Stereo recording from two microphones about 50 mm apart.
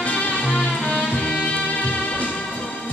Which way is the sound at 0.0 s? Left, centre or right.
Left.